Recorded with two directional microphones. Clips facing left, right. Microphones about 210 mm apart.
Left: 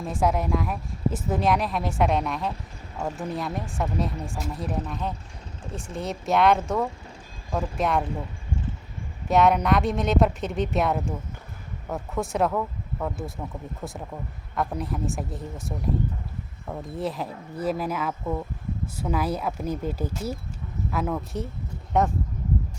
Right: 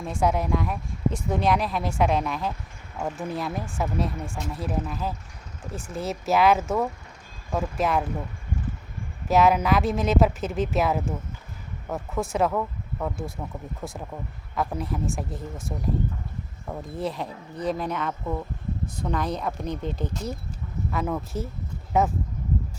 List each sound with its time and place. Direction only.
0.0 s speech: centre (ahead or behind)
9.3 s speech: centre (ahead or behind)